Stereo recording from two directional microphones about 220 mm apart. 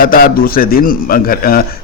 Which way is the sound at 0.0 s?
40° left (ahead or behind).